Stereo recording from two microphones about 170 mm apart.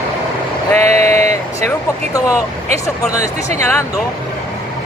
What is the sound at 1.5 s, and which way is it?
Speech, 20° left (ahead or behind).